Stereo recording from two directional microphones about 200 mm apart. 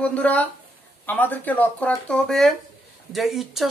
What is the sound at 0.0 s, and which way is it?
A woman's voice, 5° left (ahead or behind).